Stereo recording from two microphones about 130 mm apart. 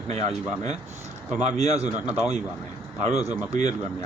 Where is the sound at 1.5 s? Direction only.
55° right (ahead or behind).